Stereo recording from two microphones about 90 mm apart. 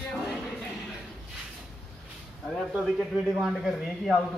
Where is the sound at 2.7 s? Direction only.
10° right (ahead or behind).